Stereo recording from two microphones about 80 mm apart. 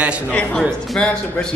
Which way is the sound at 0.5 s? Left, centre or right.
Centre.